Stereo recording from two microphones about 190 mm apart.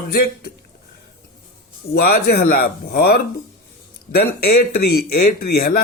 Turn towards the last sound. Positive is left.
turn(degrees=50)  # may be behind; listen again after turning